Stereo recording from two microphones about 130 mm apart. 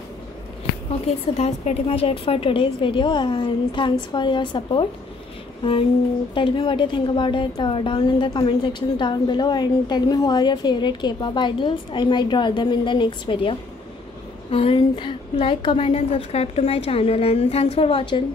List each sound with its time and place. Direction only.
1.0 s a woman's voice: 55° left (ahead or behind)
5.6 s a sound: 45° left (ahead or behind)
6.3 s a woman's voice: 40° left (ahead or behind)